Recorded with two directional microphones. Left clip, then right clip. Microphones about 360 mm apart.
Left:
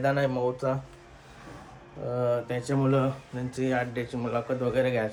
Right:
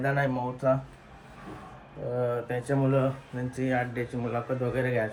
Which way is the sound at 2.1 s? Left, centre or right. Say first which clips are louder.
Left 2 dB; centre.